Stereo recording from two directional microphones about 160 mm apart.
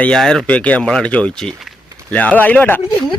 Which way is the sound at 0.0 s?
5° left (ahead or behind).